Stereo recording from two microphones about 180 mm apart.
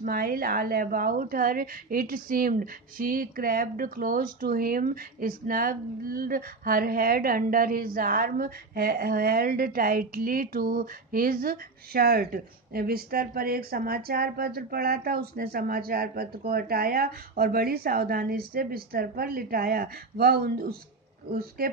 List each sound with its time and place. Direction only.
0.0 s a woman's voice: 55° right (ahead or behind)